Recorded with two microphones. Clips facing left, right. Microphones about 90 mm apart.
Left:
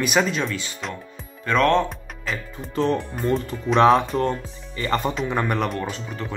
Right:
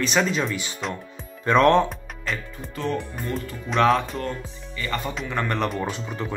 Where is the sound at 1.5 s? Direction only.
20° right (ahead or behind).